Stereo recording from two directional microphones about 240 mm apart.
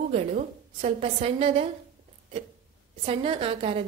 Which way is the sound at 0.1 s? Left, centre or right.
Right.